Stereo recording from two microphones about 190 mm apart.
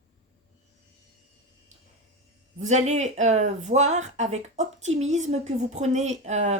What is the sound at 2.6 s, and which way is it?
Speech, 40° right (ahead or behind).